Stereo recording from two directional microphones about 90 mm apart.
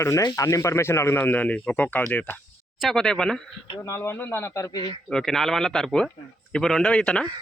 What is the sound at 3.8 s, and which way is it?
Speech, 30° left (ahead or behind).